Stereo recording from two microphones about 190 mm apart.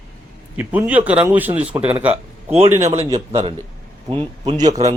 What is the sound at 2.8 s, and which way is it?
A man's voice, 35° right (ahead or behind).